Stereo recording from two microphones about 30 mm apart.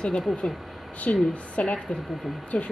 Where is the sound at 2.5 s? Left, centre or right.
Left.